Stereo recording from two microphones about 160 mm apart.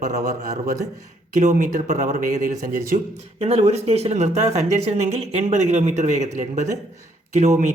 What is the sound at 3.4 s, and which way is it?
A man's voice, 40° right (ahead or behind).